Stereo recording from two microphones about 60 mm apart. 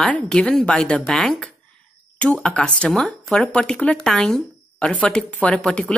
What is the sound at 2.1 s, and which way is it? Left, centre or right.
Speech, centre.